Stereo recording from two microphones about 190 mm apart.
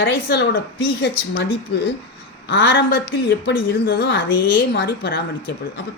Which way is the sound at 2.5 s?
75° left (ahead or behind).